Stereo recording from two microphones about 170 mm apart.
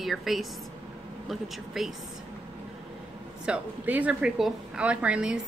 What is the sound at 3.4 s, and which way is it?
Speech, 10° right (ahead or behind).